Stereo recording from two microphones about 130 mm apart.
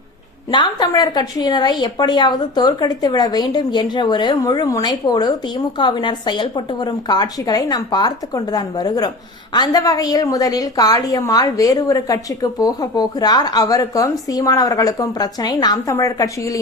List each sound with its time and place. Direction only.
0.5 s a woman's voice: 35° left (ahead or behind)